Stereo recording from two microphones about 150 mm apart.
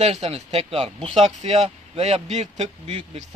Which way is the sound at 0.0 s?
45° right (ahead or behind).